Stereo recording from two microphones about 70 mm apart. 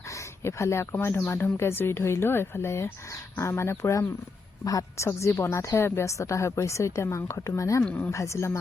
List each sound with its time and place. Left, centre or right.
0.4 s a woman's voice: left
4.6 s a woman's voice: left
5.0 s a woman's voice: left
7.9 s a woman's voice: left
8.1 s a woman's voice: left